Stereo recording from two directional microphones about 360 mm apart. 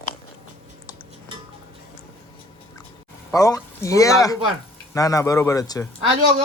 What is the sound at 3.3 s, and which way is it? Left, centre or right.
Speech, centre.